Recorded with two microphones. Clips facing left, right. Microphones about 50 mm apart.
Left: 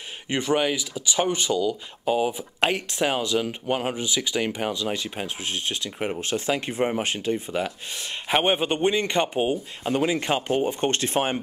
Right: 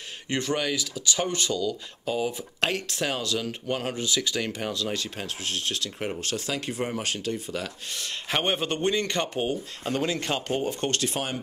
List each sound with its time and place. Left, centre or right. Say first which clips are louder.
0.3 s speech: left 4 dB; centre